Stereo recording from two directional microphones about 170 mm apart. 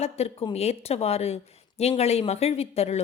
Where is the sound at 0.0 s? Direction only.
40° left (ahead or behind).